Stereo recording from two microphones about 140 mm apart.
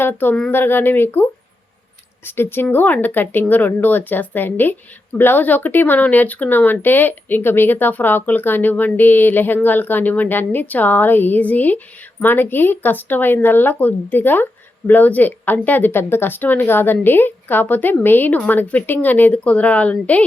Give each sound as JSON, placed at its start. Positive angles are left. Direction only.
{"t": 0.0, "sound": "speech", "side_deg": 15}